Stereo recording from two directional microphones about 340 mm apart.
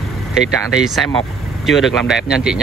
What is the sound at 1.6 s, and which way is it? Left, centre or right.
Speech, centre.